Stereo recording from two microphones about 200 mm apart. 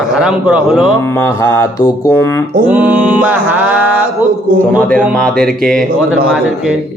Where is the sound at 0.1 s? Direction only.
5° right (ahead or behind).